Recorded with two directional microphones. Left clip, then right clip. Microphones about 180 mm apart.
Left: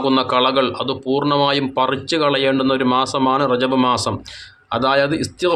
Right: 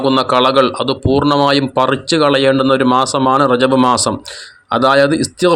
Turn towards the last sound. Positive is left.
turn(degrees=-35)  # may be behind; listen again after turning